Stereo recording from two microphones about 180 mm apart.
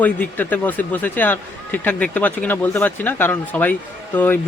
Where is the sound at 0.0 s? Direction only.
10° left (ahead or behind).